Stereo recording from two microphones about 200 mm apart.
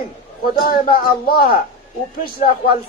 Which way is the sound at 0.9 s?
50° left (ahead or behind).